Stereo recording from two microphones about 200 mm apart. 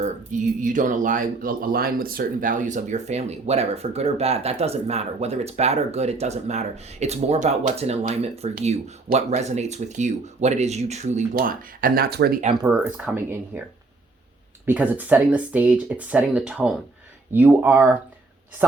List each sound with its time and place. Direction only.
0.0 s speech: 40° right (ahead or behind)
12.6 s speech: 10° right (ahead or behind)
14.7 s speech: 10° right (ahead or behind)